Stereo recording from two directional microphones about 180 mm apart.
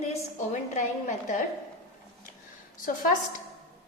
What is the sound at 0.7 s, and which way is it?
Speech, 45° left (ahead or behind).